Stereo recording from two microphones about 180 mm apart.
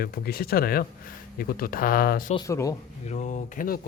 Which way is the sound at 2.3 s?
15° left (ahead or behind).